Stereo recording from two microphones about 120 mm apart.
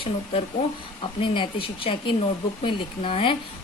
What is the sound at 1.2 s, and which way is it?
A woman's voice, 45° left (ahead or behind).